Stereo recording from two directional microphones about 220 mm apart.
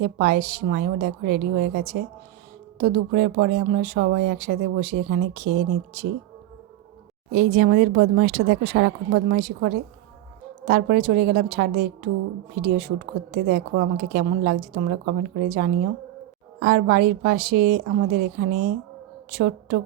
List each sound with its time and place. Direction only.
0.0 s speech: 45° right (ahead or behind)
7.3 s speech: 45° right (ahead or behind)
13.3 s a woman's voice: 45° right (ahead or behind)